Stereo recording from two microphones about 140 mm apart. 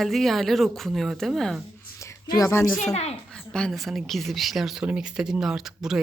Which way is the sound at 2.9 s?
50° left (ahead or behind).